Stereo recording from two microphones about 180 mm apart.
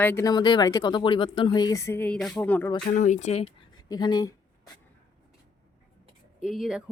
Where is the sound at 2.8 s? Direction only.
45° left (ahead or behind); by 4.7 s 20° left (ahead or behind).